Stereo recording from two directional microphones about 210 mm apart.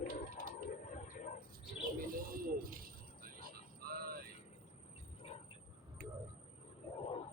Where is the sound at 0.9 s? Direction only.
40° left (ahead or behind).